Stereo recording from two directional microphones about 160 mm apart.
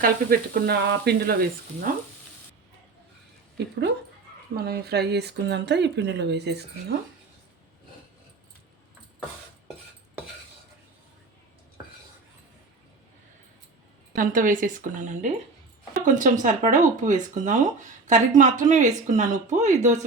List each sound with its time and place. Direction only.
0.0 s speech: 65° right (ahead or behind)
3.6 s speech: 90° right
4.5 s speech: 80° right
14.2 s speech: 55° right (ahead or behind)